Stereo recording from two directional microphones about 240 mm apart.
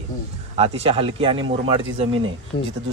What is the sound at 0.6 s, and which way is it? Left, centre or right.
Speech, right.